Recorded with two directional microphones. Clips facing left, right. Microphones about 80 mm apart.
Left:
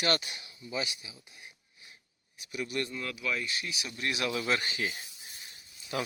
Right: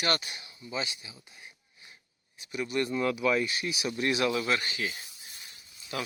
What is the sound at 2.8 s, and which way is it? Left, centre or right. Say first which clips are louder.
Speech: right 8 dB; right.